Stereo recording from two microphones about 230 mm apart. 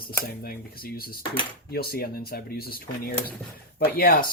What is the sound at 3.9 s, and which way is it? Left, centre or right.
Speech, left.